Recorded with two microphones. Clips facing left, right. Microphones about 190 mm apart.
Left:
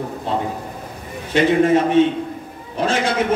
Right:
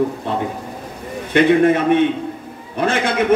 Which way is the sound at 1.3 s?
60° right (ahead or behind).